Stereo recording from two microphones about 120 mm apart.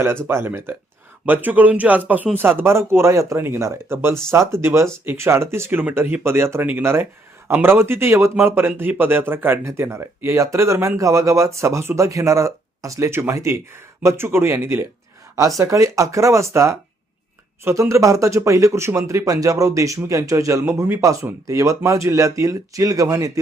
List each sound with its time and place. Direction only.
0.3 s a man's voice: 20° right (ahead or behind)